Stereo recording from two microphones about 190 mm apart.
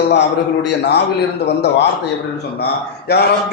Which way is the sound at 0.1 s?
65° left (ahead or behind).